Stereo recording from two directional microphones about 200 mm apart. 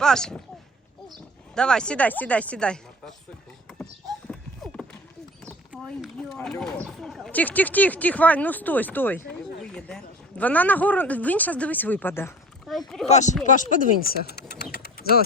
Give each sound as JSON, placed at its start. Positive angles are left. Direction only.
{"t": 0.0, "sound": "speech", "side_deg": 5}
{"t": 1.5, "sound": "speech", "side_deg": 5}
{"t": 4.3, "sound": "a sound", "side_deg": 0}
{"t": 5.8, "sound": "speech", "side_deg": 0}
{"t": 12.7, "sound": "speech", "side_deg": 0}
{"t": 13.1, "sound": "speech", "side_deg": 35}